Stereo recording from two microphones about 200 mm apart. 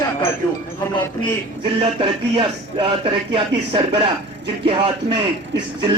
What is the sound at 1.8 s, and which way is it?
Speech, 25° right (ahead or behind).